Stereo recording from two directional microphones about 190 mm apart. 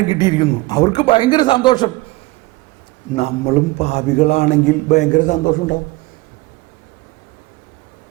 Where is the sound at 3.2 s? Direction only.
35° left (ahead or behind).